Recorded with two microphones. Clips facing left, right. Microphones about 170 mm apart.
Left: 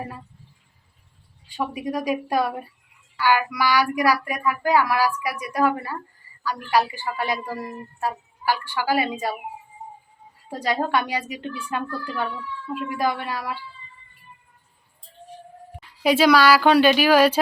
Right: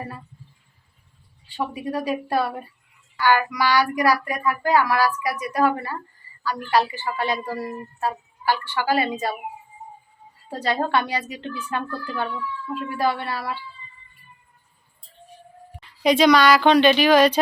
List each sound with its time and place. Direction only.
1.5 s speech: 10° left (ahead or behind)
9.8 s music: 75° left (ahead or behind)
10.5 s speech: 10° left (ahead or behind)
16.0 s speech: 5° left (ahead or behind)